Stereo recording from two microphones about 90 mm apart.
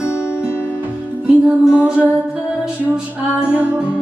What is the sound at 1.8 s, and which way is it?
Music, 15° right (ahead or behind).